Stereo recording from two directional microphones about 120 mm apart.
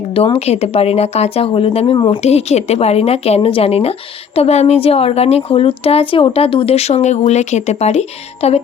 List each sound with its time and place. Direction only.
0.3 s a woman's voice: 60° left (ahead or behind)
2.0 s speech: 40° left (ahead or behind)
2.2 s a woman's voice: 65° left (ahead or behind)